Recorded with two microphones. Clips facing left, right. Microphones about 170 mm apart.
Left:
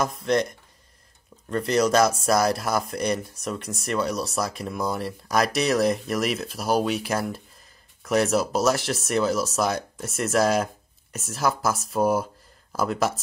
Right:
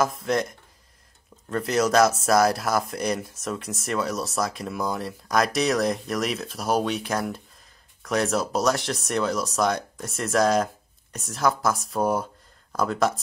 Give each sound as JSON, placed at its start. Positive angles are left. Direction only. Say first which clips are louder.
{"t": 0.0, "sound": "speech", "louder": "left 1 dB", "side_deg": 0}